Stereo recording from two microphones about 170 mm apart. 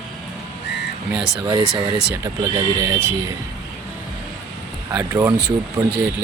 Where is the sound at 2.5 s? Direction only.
15° right (ahead or behind).